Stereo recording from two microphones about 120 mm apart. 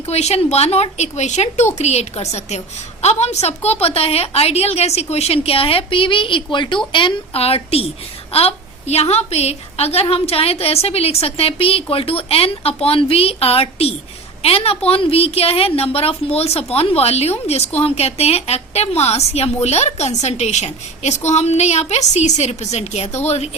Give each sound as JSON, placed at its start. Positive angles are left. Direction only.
{"t": 0.0, "sound": "a woman's voice", "side_deg": 60}